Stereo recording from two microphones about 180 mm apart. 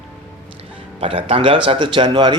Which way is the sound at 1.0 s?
30° right (ahead or behind).